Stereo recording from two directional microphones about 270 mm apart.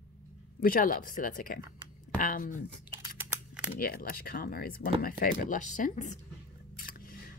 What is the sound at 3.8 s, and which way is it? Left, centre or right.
Speech, left.